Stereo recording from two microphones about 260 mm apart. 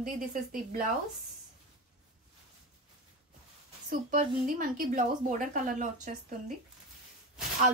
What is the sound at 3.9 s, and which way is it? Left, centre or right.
A woman's voice, right.